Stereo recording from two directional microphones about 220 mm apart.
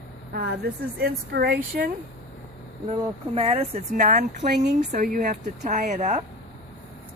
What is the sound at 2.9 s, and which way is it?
Speech, 30° right (ahead or behind).